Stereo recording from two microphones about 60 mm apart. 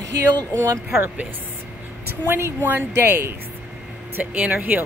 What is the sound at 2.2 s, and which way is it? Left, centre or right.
Speech, right.